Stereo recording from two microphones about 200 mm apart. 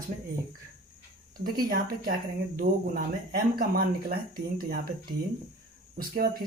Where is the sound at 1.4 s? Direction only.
50° right (ahead or behind).